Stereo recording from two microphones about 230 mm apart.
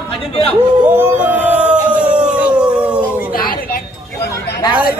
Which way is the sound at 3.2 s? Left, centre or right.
Left.